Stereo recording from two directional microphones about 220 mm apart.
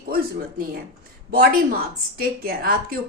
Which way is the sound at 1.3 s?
40° right (ahead or behind).